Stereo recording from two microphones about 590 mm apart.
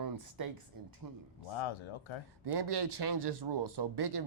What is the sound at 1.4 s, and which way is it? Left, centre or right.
Speech, left.